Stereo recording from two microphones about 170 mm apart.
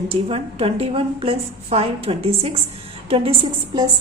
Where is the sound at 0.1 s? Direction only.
35° right (ahead or behind).